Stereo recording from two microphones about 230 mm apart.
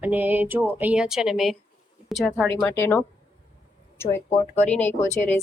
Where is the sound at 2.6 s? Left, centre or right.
Centre.